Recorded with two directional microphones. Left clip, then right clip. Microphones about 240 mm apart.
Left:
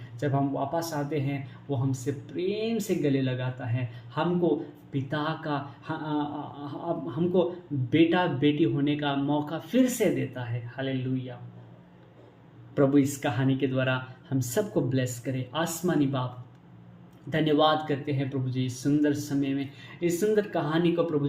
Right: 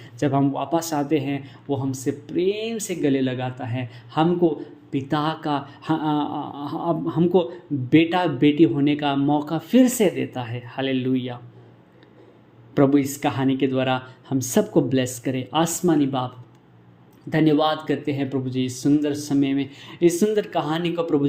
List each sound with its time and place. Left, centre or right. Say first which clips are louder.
0.2 s speech: right 6 dB; right
12.7 s speech: right 5 dB; right